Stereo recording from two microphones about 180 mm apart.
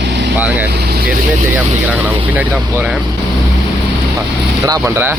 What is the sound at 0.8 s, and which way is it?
Vehicle, 65° right (ahead or behind).